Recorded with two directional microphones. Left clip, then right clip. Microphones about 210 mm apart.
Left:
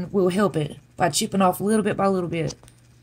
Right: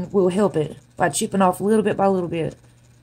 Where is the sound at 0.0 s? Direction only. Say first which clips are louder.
Right 2 dB; 20° left (ahead or behind).